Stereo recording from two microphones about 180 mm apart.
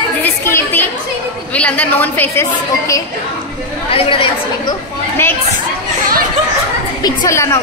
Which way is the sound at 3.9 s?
30° left (ahead or behind).